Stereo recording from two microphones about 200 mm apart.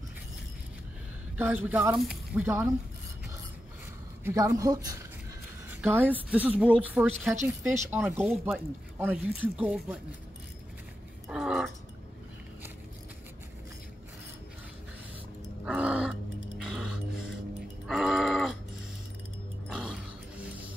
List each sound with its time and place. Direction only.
1.4 s a woman's voice: 10° right (ahead or behind)
4.2 s a woman's voice: 15° right (ahead or behind)
8.0 s a woman's voice: centre (ahead or behind)
11.2 s speech: 5° right (ahead or behind)
15.6 s music: 5° right (ahead or behind)
17.8 s groan: centre (ahead or behind)
19.7 s music: 5° right (ahead or behind)